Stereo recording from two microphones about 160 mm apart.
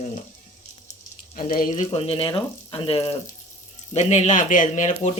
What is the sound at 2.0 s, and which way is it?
Speech, 35° left (ahead or behind).